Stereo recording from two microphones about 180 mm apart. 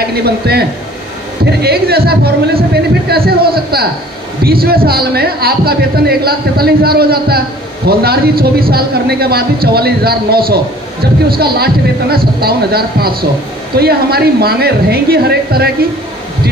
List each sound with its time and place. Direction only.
0.0 s a man's voice: 60° right (ahead or behind)